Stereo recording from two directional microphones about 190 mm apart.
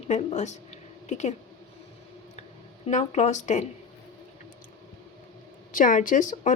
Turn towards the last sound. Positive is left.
turn(degrees=40)  # may be behind; listen again after turning